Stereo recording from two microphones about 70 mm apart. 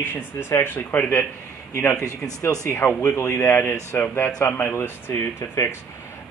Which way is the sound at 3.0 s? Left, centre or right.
Left.